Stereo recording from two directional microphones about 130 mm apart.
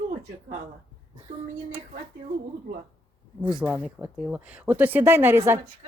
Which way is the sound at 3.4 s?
10° right (ahead or behind).